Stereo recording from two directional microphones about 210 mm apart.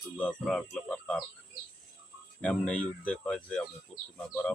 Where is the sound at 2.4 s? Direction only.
5° left (ahead or behind).